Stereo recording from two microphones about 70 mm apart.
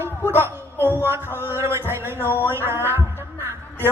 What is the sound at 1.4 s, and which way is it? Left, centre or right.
Music, right.